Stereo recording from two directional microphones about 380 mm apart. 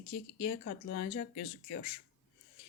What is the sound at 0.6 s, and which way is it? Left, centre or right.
Speech, left.